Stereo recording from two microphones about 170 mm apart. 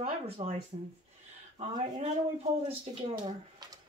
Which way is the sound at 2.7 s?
35° right (ahead or behind).